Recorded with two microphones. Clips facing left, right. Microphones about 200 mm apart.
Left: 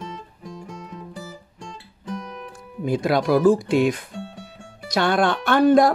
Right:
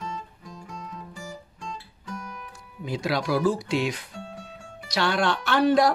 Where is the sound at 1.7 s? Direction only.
30° left (ahead or behind).